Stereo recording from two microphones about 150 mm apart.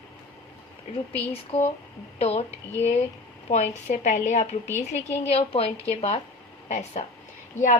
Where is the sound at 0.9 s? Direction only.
45° left (ahead or behind).